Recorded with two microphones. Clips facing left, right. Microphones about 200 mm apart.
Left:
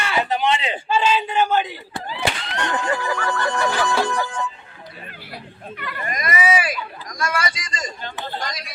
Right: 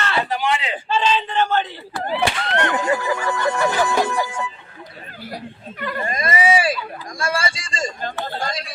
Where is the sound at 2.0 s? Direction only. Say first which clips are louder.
Right 5 dB; 60° right (ahead or behind).